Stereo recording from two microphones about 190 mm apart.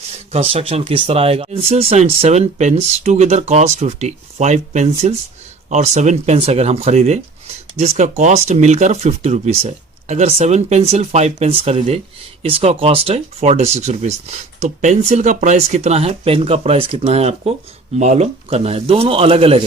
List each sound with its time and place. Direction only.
0.3 s speech: 30° right (ahead or behind)